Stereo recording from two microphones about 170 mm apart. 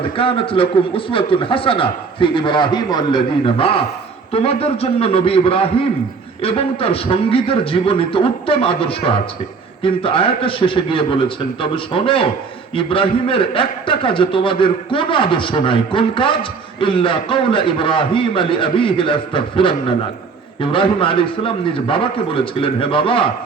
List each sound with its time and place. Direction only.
0.0 s a man's voice: 30° left (ahead or behind)